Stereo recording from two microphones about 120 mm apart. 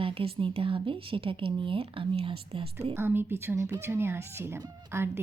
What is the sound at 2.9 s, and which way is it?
Speech, 20° right (ahead or behind).